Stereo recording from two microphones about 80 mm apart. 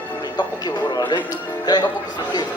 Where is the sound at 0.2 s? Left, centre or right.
Left.